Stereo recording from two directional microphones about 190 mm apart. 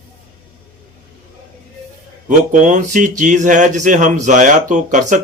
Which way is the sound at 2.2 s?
40° right (ahead or behind).